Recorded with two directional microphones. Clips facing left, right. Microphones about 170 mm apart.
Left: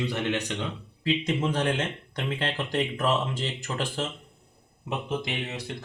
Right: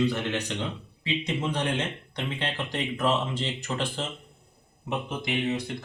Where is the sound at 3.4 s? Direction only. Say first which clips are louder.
Right 1 dB; 45° left (ahead or behind).